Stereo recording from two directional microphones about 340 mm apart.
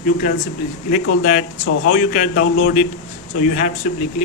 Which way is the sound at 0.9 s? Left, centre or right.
Left.